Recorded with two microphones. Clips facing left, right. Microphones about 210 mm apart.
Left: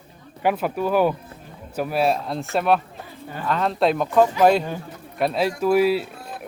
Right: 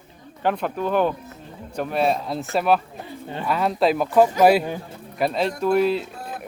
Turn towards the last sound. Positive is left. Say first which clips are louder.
# left 1 dB
turn(degrees=5)  # may be behind; listen again after turning